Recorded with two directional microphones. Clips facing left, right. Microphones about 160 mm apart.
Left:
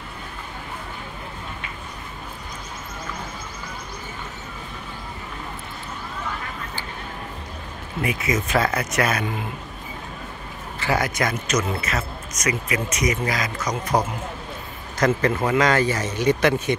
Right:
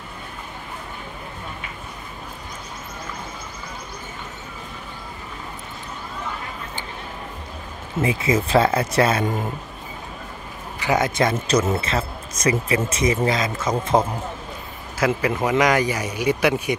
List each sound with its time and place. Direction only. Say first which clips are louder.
8.0 s speech: right 4 dB; 30° right (ahead or behind)
9.2 s a man's voice: right 4 dB; 45° right (ahead or behind)
10.8 s speech: right 3 dB; 20° right (ahead or behind)
15.0 s speech: left 1 dB; 10° right (ahead or behind)